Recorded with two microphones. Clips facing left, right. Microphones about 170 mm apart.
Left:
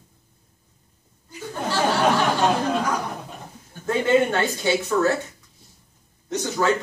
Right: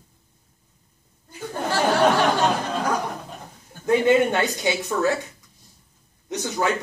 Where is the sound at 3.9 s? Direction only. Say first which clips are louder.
Right 2 dB; 15° right (ahead or behind).